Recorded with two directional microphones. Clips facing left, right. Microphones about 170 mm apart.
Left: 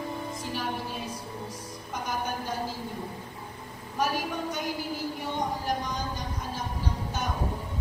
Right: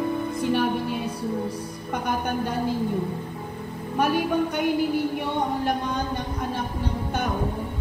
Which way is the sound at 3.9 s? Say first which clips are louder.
Right 7 dB; 60° right (ahead or behind).